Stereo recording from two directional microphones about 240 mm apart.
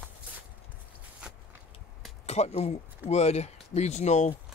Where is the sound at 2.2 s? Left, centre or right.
Left.